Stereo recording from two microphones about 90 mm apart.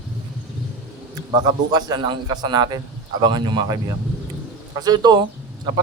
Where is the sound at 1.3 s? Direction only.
50° right (ahead or behind).